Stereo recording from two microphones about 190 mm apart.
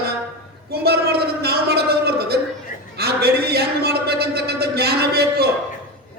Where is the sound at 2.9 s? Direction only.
55° right (ahead or behind).